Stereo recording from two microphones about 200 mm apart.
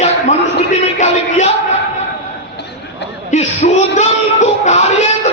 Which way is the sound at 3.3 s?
35° left (ahead or behind).